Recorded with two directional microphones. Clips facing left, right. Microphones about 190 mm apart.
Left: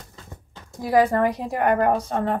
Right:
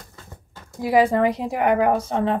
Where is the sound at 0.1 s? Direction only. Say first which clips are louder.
Left 1 dB; 20° left (ahead or behind).